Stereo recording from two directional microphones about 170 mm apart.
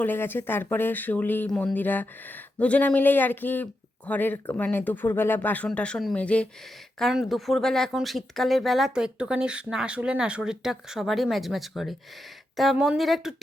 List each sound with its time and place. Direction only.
0.0 s speech: 10° left (ahead or behind)